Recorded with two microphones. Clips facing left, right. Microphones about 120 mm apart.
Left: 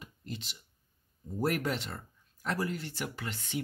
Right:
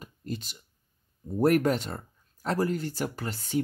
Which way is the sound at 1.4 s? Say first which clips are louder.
Right 9 dB; 50° right (ahead or behind).